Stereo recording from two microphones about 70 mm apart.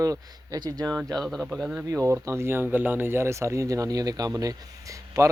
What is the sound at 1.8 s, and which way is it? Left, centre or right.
Speech, right.